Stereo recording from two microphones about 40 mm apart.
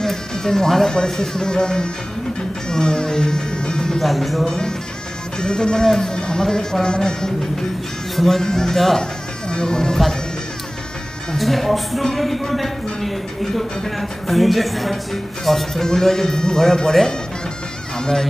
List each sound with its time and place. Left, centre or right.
0.0 s speech: centre
4.0 s speech: centre
5.4 s speech: centre
9.5 s speech: centre
11.3 s speech: centre